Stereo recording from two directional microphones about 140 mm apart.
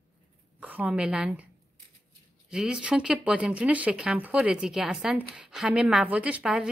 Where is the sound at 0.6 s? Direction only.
10° right (ahead or behind).